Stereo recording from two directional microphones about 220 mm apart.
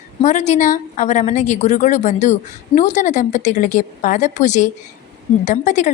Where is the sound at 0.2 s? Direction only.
30° left (ahead or behind).